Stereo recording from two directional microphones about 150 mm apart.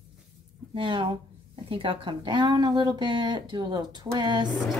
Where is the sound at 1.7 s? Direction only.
35° right (ahead or behind).